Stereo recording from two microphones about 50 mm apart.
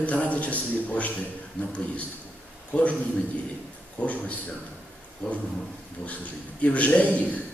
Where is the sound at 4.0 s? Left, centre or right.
Left.